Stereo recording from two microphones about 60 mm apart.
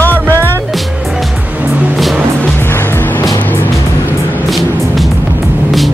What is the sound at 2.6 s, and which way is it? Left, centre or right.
Music, left.